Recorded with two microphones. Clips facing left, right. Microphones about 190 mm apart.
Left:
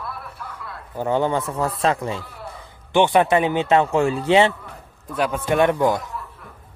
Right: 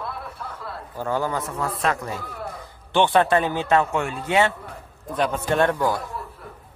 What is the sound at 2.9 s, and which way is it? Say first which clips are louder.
A man's voice: left 2 dB; 15° left (ahead or behind).